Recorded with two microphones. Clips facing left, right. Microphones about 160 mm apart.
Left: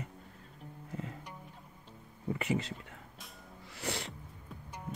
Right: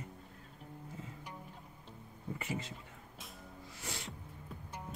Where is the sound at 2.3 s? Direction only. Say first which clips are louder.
Left 7 dB; 75° left (ahead or behind).